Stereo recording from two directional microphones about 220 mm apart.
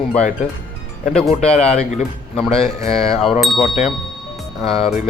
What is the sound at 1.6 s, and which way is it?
Speech, 30° left (ahead or behind).